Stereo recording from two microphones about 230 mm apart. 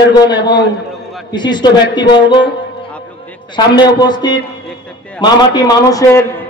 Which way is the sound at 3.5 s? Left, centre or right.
Centre.